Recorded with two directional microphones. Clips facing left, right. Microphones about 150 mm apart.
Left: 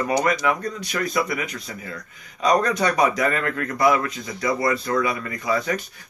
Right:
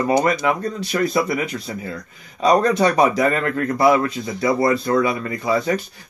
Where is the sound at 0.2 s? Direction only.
25° right (ahead or behind).